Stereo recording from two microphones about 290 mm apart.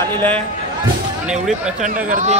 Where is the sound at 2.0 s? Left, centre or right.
Right.